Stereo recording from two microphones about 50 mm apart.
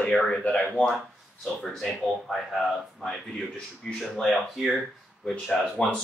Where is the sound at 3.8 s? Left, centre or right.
Centre.